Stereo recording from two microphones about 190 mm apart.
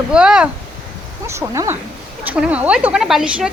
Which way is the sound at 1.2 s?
15° right (ahead or behind).